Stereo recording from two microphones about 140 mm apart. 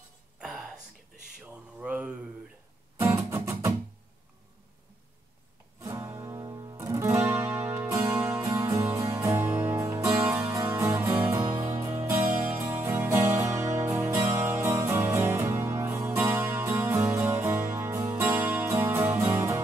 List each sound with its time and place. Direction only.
0.4 s music: centre (ahead or behind)
1.4 s mantra: 10° right (ahead or behind)
3.0 s music: 20° right (ahead or behind)
5.8 s music: 20° right (ahead or behind)